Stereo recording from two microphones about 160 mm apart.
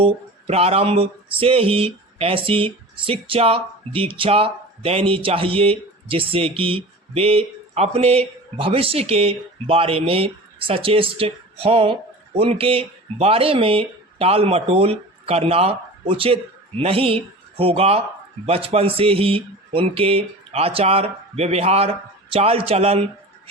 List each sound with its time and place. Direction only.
0.0 s speech: 40° right (ahead or behind)